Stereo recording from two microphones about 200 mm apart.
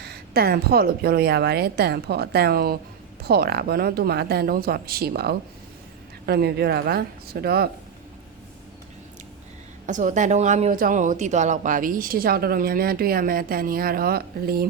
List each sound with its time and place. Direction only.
0.0 s speech: 50° right (ahead or behind)
9.8 s speech: 40° right (ahead or behind)